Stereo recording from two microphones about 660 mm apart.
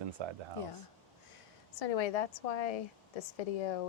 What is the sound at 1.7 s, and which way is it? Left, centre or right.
Speech, left.